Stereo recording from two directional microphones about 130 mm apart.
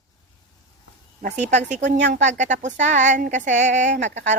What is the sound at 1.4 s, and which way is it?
A woman's voice, 70° right (ahead or behind).